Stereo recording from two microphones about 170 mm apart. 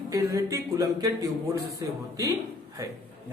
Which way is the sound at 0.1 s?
20° right (ahead or behind).